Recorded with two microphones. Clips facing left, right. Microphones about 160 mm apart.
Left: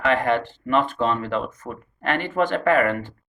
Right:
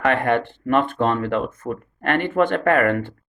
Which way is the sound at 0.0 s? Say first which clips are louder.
Right 1 dB; 55° right (ahead or behind).